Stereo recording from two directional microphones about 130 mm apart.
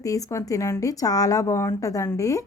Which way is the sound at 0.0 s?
25° left (ahead or behind).